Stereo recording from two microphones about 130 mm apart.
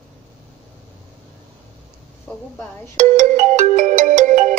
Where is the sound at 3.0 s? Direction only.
65° right (ahead or behind).